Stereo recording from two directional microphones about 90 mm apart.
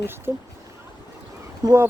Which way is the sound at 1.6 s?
45° right (ahead or behind).